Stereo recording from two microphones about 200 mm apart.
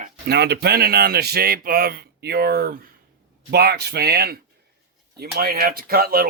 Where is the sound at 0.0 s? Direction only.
55° right (ahead or behind).